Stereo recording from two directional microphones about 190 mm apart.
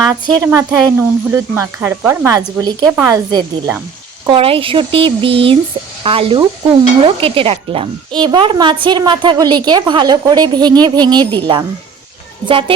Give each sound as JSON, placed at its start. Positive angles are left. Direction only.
{"t": 0.1, "sound": "speech", "side_deg": -20}
{"t": 4.3, "sound": "speech", "side_deg": -30}